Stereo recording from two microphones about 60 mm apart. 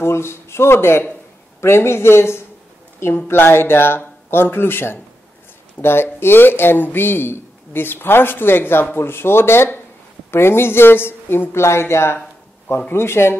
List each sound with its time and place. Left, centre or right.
0.0 s speech: left